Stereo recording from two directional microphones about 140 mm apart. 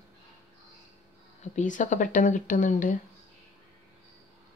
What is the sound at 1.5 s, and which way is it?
Speech, 65° left (ahead or behind).